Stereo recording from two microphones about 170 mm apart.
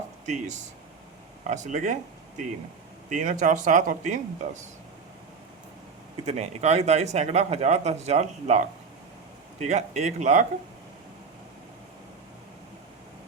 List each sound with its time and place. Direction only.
0.3 s speech: 45° right (ahead or behind)
3.1 s speech: 50° right (ahead or behind)
6.2 s speech: 40° right (ahead or behind)